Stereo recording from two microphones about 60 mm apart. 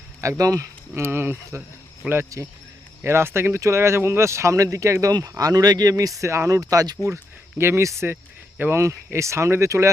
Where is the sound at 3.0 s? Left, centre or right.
Right.